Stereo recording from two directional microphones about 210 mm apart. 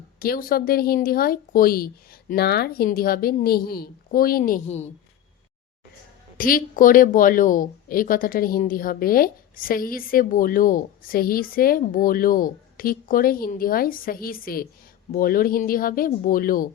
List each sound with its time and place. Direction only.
0.2 s a woman's voice: 45° left (ahead or behind)
6.3 s a woman's voice: 40° left (ahead or behind)